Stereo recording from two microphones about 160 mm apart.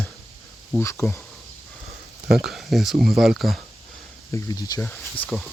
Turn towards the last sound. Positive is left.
turn(degrees=0)  # may be behind; listen again after turning